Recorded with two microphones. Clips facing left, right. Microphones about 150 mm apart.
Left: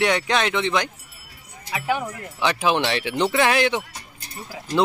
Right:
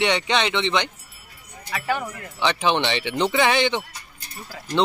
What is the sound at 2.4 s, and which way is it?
Speech, 5° left (ahead or behind).